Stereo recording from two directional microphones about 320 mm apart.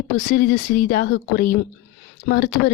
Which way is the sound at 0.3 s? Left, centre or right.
Left.